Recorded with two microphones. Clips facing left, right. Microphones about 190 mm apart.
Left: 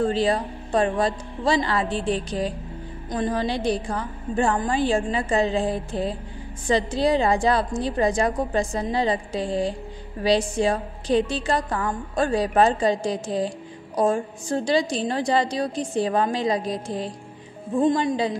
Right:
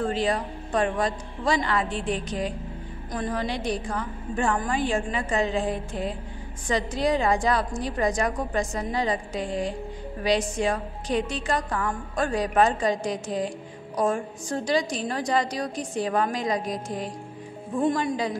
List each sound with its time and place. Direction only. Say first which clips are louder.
0.0 s a woman's voice: left 4 dB; 30° left (ahead or behind)